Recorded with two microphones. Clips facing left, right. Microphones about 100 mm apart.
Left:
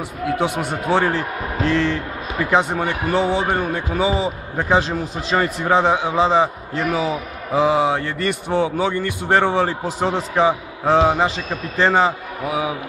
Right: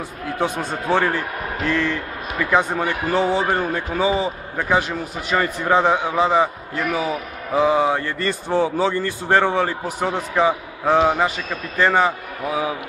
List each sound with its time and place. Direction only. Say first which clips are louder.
0.4 s a man's voice: left 1 dB; 20° left (ahead or behind)